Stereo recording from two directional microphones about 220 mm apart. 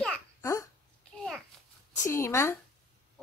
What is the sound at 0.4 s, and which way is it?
Babbling, 15° left (ahead or behind).